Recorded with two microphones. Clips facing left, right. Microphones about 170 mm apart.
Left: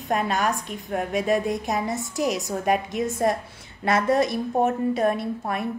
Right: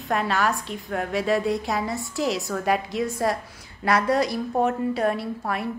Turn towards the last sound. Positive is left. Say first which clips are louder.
# left 1 dB
turn(degrees=20)  # may be behind; listen again after turning